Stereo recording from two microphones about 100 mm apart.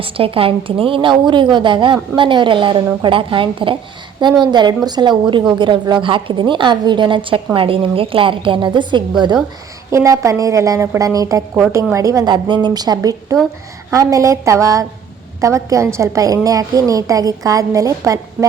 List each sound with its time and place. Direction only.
0.0 s a woman's voice: 65° right (ahead or behind)
4.2 s a woman's voice: 50° right (ahead or behind)
9.9 s a woman's voice: 30° right (ahead or behind)